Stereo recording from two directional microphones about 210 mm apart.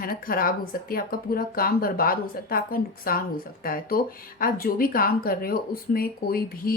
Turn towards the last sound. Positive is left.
turn(degrees=45)  # may be behind; listen again after turning